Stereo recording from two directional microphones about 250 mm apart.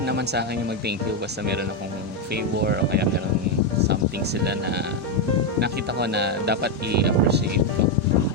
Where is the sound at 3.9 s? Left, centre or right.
Right.